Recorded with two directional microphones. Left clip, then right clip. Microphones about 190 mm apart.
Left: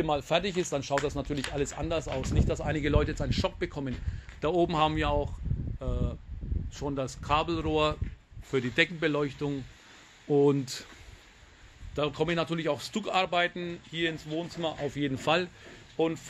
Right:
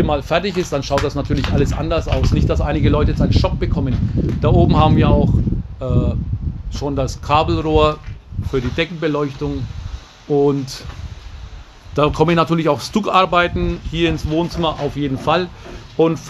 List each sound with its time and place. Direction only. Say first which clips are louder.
0.0 s speech: right 10 dB; 30° left (ahead or behind)
5.8 s speech: right 14 dB; 30° left (ahead or behind); by 10.9 s 50° left (ahead or behind)
11.9 s speech: right 14 dB; 5° right (ahead or behind)
15.0 s speech: right 8 dB; 40° left (ahead or behind)
16.0 s speech: right 13 dB; 5° right (ahead or behind)